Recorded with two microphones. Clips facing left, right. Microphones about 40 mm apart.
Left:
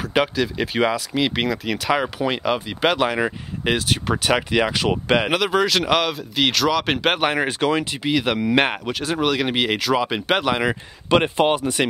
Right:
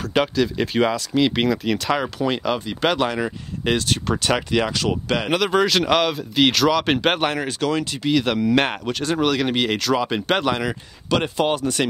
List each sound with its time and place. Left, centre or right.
0.1 s speech: centre; by 5.3 s left
5.3 s speech: centre
7.2 s speech: left; by 10.6 s centre
10.6 s speech: left